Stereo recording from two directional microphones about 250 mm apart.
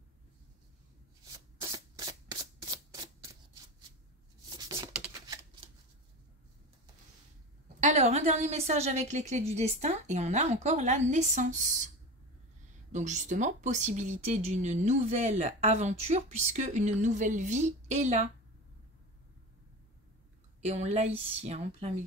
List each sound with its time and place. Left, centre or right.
1.2 s shuffling cards: centre
4.5 s a sound: centre
4.9 s shuffling cards: centre
7.8 s speech: right
12.9 s speech: right
20.6 s speech: right